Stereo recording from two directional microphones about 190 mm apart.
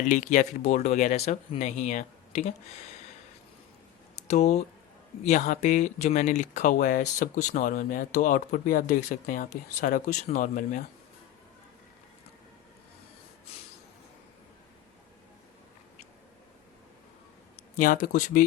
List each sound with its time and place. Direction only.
0.1 s speech: 40° left (ahead or behind)
4.3 s speech: 35° left (ahead or behind)
17.6 s speech: 45° left (ahead or behind)